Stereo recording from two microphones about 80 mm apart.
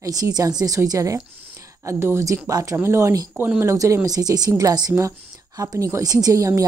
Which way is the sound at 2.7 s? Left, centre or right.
Right.